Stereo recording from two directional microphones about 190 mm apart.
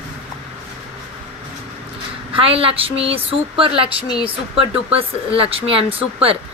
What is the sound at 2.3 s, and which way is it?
A woman's voice, 30° right (ahead or behind).